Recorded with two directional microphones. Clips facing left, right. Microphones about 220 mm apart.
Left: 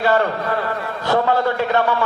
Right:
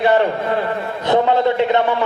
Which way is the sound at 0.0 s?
20° right (ahead or behind).